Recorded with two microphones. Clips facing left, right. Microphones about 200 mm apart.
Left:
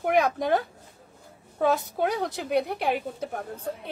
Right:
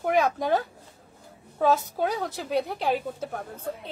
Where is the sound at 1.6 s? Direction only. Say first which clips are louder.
Even; 60° left (ahead or behind).